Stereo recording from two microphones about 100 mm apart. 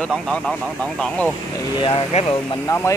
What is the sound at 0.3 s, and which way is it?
Speech, 5° left (ahead or behind).